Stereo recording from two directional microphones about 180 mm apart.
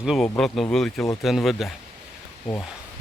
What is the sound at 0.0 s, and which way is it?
Speech, centre (ahead or behind).